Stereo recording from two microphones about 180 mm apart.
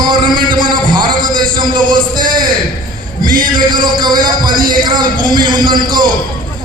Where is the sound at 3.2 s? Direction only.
50° right (ahead or behind).